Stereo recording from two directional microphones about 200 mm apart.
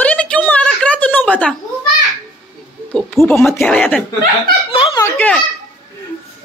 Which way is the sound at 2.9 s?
10° left (ahead or behind).